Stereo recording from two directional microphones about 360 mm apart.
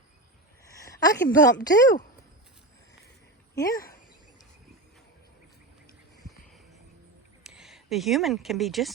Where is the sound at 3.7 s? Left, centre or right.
Left.